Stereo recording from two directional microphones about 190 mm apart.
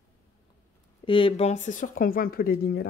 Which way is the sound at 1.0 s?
25° left (ahead or behind).